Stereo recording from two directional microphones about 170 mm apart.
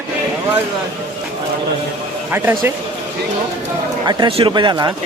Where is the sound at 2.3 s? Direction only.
10° right (ahead or behind).